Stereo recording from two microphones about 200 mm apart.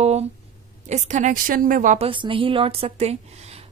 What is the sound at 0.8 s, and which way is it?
A woman's voice, 35° right (ahead or behind).